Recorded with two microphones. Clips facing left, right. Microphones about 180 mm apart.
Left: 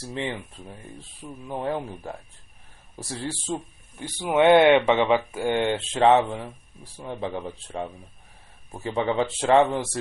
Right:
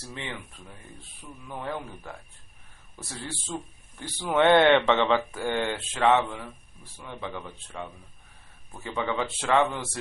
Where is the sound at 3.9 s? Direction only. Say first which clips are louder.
Left 3 dB; 15° left (ahead or behind).